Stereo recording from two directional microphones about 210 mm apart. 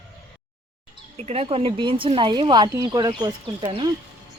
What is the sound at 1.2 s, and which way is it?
Speech, 30° right (ahead or behind).